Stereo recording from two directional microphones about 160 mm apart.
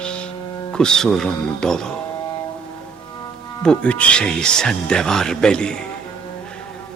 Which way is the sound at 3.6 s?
5° left (ahead or behind).